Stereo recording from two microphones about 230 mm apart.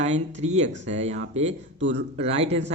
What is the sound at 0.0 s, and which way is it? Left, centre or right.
Speech, right.